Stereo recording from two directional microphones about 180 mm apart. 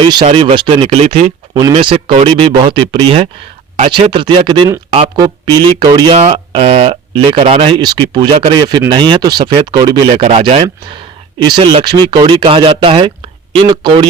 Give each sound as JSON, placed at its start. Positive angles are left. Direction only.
{"t": 0.0, "sound": "speech", "side_deg": -25}